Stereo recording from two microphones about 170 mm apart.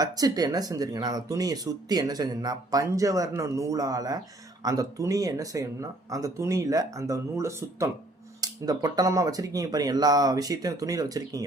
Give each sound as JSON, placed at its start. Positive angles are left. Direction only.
{"t": 0.0, "sound": "speech", "side_deg": -20}